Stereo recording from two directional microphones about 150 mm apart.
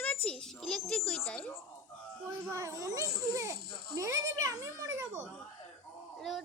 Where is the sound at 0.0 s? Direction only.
10° left (ahead or behind).